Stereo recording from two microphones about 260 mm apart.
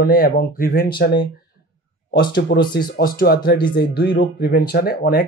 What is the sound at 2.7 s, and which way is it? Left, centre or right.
Speech, left.